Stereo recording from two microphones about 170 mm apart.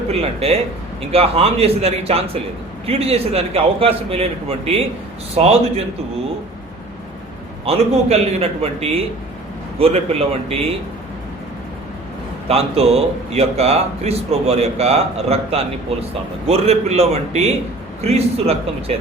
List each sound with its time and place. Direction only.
0.1 s speech: 35° right (ahead or behind)
7.6 s speech: 35° right (ahead or behind)
12.5 s speech: 35° right (ahead or behind)